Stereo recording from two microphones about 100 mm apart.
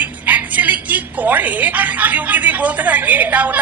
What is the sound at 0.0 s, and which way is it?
A woman's voice, 15° right (ahead or behind).